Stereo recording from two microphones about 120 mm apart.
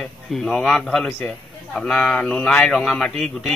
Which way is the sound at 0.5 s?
5° left (ahead or behind).